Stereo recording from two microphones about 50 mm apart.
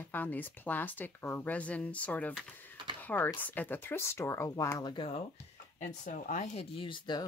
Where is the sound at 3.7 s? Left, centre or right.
Left.